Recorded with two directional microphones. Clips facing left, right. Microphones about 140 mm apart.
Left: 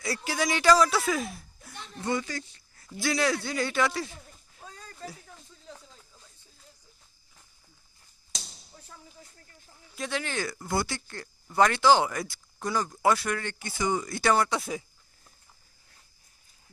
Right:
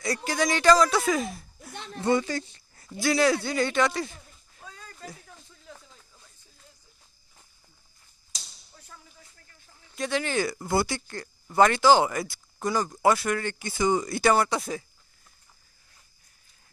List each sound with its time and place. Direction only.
0.0 s a man's voice: 5° left (ahead or behind)
1.7 s a sound: 70° right (ahead or behind)
2.0 s speech: 30° right (ahead or behind)
3.0 s a man's voice: centre (ahead or behind)
4.6 s a sound: 35° left (ahead or behind)
8.7 s a sound: 25° left (ahead or behind)
9.9 s a man's voice: centre (ahead or behind)
10.4 s a man's voice: 15° right (ahead or behind)
13.7 s speech: 25° right (ahead or behind)
14.1 s a man's voice: 10° right (ahead or behind)